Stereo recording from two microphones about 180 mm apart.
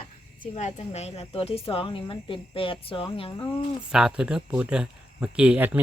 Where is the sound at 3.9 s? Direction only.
5° right (ahead or behind).